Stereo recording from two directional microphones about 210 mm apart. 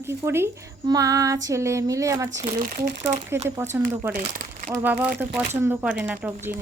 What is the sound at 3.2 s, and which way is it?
Speech, 10° right (ahead or behind).